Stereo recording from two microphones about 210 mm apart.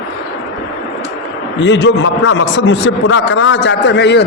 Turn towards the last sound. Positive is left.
turn(degrees=55)  # may be behind; listen again after turning